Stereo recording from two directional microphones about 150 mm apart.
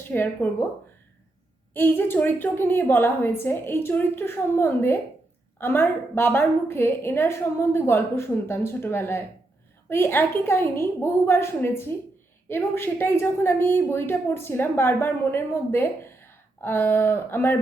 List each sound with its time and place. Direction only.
0.1 s a woman's voice: 15° left (ahead or behind)
1.7 s a woman's voice: 15° left (ahead or behind)